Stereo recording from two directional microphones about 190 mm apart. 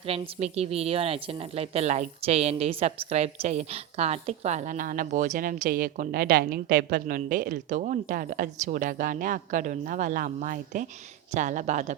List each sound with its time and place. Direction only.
0.0 s a woman's voice: 35° right (ahead or behind)